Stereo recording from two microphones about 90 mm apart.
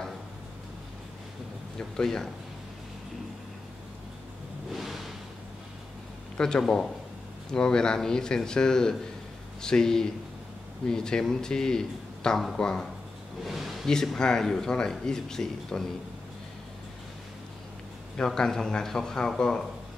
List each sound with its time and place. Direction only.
1.8 s speech: 5° left (ahead or behind)
4.6 s vehicle: centre (ahead or behind)
6.3 s speech: 10° left (ahead or behind)
18.1 s speech: 10° left (ahead or behind)